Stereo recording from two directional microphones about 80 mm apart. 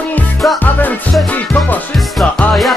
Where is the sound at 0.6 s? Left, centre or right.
Left.